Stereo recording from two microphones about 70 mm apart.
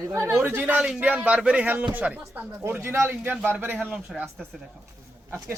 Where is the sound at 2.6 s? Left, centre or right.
Right.